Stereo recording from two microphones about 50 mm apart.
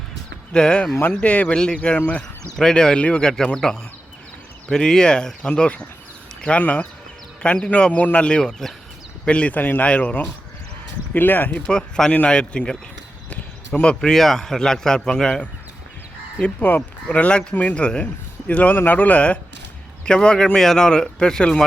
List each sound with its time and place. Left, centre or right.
0.5 s speech: centre
1.5 s speech: centre
9.2 s speech: left
9.6 s speech: left
9.8 s speech: left
11.1 s speech: left
11.6 s speech: centre
13.7 s speech: centre
16.6 s speech: left
17.1 s speech: left